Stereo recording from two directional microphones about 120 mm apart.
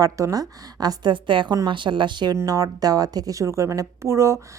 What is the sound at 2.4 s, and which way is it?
Speech, 30° right (ahead or behind).